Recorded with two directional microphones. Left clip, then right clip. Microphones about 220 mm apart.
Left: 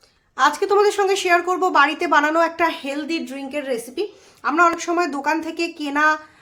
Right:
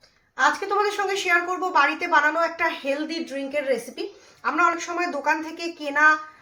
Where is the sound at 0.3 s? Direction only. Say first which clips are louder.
Left 5 dB; 60° left (ahead or behind).